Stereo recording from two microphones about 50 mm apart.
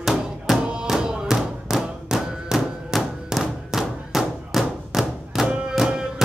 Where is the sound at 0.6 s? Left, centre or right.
Right.